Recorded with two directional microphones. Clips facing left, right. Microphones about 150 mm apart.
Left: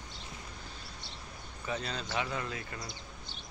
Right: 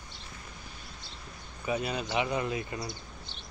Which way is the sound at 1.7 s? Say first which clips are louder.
Right 5 dB; 10° right (ahead or behind).